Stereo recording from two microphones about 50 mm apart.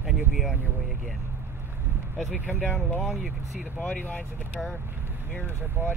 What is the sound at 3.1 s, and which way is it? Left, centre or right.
Speech, centre.